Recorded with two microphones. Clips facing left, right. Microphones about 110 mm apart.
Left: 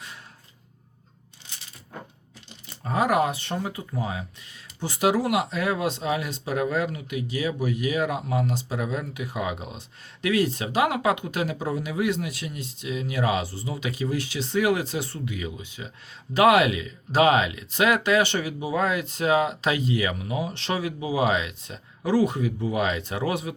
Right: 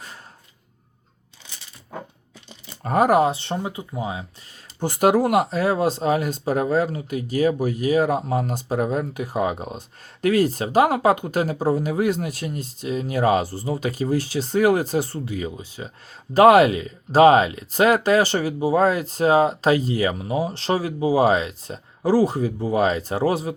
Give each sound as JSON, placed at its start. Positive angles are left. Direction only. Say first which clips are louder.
{"t": 2.8, "sound": "speech", "louder": "right 6 dB", "side_deg": -55}
{"t": 3.1, "sound": "speech", "louder": "right 5 dB", "side_deg": -30}
{"t": 4.5, "sound": "speech", "louder": "right 7 dB", "side_deg": -50}